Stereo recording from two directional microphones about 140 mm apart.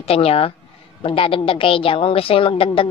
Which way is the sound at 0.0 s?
45° left (ahead or behind).